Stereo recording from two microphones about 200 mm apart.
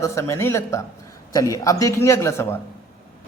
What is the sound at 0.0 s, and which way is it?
A man's voice, 15° left (ahead or behind).